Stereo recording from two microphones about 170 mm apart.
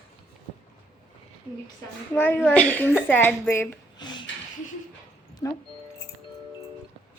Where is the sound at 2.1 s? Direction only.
10° left (ahead or behind).